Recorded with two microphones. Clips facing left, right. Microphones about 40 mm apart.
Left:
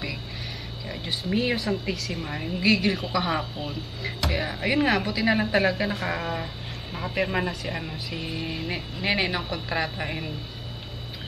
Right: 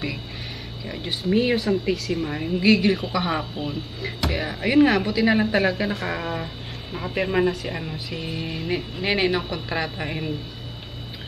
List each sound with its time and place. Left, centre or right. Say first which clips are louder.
0.8 s a woman's voice: right 5 dB; centre